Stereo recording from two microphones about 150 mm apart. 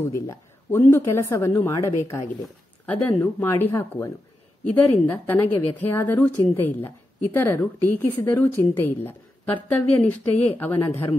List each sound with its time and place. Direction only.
0.0 s a woman's voice: 20° left (ahead or behind)